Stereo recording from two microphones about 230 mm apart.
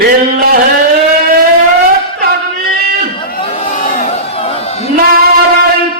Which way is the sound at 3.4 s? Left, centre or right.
Left.